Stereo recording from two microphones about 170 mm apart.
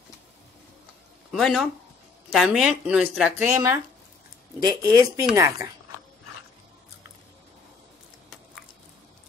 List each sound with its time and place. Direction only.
1.3 s a woman's voice: centre (ahead or behind)
4.6 s speech: 25° right (ahead or behind)